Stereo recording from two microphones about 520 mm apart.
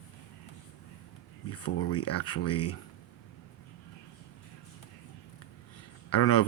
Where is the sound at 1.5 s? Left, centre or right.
Left.